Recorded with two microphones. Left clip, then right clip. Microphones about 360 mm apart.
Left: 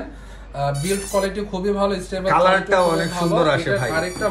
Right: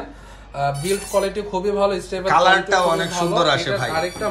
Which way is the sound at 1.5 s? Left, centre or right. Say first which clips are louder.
Right 4 dB; centre.